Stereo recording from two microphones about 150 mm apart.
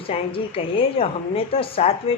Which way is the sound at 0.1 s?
40° left (ahead or behind).